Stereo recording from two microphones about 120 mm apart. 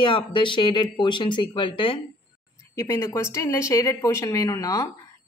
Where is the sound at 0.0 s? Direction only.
40° left (ahead or behind).